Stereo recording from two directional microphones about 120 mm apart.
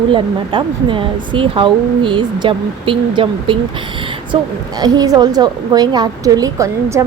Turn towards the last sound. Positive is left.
turn(degrees=-25)  # may be behind; listen again after turning